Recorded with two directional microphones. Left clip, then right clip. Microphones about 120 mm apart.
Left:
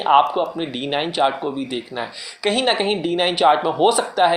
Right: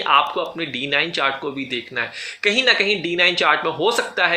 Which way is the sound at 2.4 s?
5° right (ahead or behind).